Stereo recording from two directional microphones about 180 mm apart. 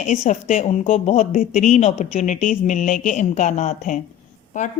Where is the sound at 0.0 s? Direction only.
40° left (ahead or behind).